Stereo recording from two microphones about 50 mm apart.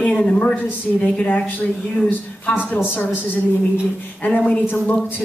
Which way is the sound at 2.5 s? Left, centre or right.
Left.